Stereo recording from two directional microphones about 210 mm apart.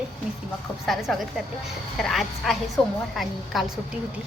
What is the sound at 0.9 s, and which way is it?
A woman's voice, centre (ahead or behind).